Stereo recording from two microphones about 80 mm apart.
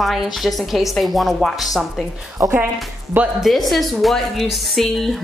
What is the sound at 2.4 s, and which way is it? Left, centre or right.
Speech, right.